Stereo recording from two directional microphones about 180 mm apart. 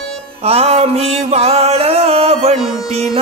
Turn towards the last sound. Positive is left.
turn(degrees=-35)  # may be behind; listen again after turning